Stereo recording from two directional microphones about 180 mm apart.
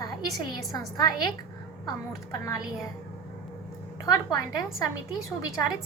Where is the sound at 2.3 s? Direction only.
20° left (ahead or behind).